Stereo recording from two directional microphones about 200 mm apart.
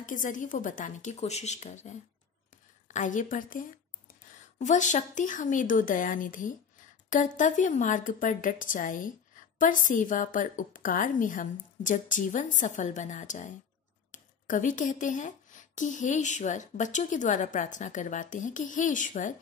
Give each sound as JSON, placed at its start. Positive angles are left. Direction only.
{"t": 0.0, "sound": "speech", "side_deg": 40}
{"t": 2.9, "sound": "speech", "side_deg": 40}